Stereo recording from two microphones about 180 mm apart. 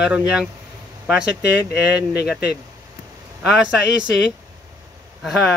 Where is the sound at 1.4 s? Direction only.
65° left (ahead or behind).